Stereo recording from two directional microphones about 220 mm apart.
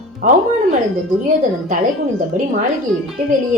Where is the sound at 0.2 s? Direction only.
35° right (ahead or behind).